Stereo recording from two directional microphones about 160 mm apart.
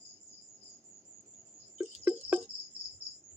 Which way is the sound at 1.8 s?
10° right (ahead or behind).